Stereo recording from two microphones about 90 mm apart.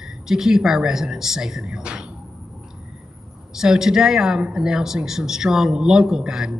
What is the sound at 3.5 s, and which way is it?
Speech, 5° right (ahead or behind).